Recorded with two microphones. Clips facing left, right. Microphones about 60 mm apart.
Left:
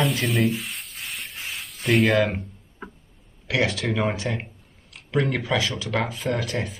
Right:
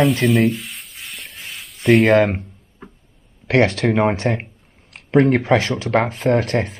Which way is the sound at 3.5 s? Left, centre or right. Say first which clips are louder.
Right 8 dB; right.